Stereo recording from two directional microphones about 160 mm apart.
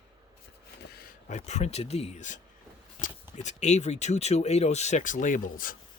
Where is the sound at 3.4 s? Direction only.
45° left (ahead or behind).